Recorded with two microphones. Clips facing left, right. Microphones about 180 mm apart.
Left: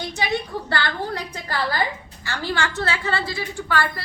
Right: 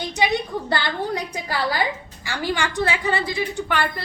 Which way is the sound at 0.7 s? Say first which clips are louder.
Right 1 dB; 15° right (ahead or behind).